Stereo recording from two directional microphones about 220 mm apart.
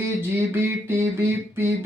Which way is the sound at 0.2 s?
10° right (ahead or behind).